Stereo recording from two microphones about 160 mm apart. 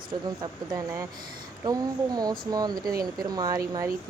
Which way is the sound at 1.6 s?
25° right (ahead or behind).